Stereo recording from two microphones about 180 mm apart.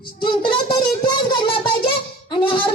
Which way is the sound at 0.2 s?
25° left (ahead or behind).